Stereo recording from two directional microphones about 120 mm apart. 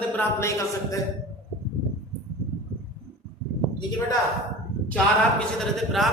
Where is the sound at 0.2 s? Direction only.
20° left (ahead or behind).